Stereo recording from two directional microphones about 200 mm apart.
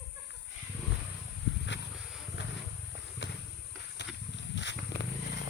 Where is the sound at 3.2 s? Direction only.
65° left (ahead or behind).